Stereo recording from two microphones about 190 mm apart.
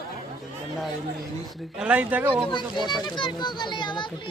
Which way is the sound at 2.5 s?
25° left (ahead or behind).